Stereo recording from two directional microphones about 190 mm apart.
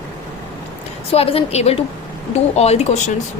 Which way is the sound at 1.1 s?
30° left (ahead or behind).